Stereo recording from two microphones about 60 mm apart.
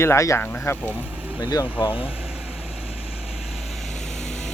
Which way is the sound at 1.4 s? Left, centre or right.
Left.